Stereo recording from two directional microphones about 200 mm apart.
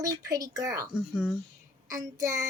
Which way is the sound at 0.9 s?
5° right (ahead or behind).